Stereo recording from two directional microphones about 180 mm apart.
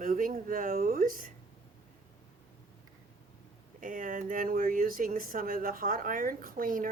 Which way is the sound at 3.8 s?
50° right (ahead or behind).